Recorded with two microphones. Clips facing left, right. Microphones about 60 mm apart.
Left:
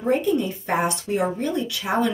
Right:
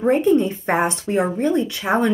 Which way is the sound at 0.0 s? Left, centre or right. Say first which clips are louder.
Right 5 dB; right.